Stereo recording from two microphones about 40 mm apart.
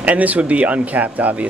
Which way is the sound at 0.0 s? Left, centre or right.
Right.